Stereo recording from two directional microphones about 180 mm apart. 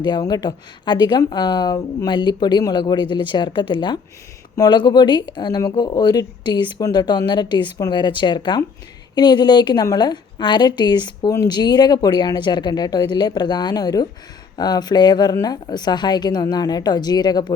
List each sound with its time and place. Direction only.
0.0 s a woman's voice: 25° left (ahead or behind)